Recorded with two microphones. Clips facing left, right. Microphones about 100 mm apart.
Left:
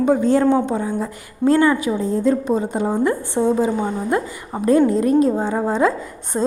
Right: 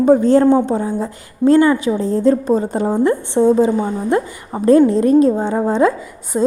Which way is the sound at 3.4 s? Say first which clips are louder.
Right 6 dB; 5° left (ahead or behind).